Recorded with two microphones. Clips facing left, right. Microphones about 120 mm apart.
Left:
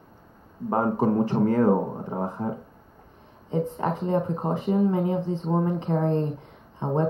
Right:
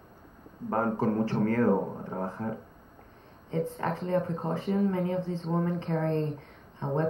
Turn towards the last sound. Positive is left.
turn(degrees=20)  # may be behind; listen again after turning